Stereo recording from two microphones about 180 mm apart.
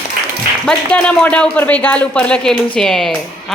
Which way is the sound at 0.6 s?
5° left (ahead or behind).